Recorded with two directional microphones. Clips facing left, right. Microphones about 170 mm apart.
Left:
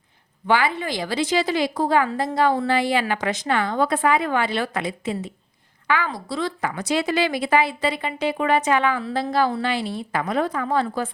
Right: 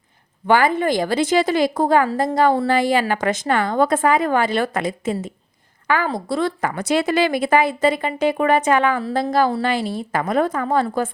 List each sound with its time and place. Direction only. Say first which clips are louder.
0.4 s a woman's voice: right 5 dB; 45° right (ahead or behind)